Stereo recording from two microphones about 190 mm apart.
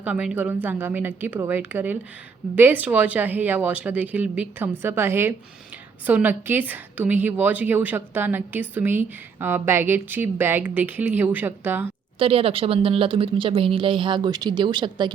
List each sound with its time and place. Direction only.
0.0 s a woman's voice: 5° right (ahead or behind)
12.2 s speech: 30° right (ahead or behind)